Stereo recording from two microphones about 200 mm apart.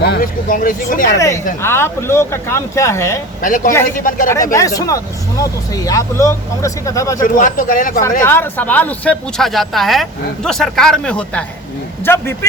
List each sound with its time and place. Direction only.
0.0 s speech: 50° left (ahead or behind)
1.6 s speech: 10° left (ahead or behind)
3.4 s speech: 40° left (ahead or behind)
4.5 s speech: 15° left (ahead or behind)
7.2 s speech: 40° left (ahead or behind)
8.2 s speech: 10° left (ahead or behind)